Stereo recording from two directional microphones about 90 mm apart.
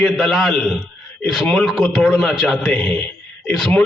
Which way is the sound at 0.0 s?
5° left (ahead or behind).